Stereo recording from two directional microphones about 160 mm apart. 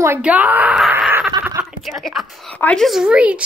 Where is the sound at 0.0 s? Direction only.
10° right (ahead or behind).